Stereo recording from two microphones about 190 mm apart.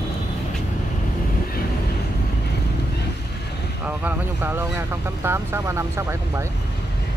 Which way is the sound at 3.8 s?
10° right (ahead or behind).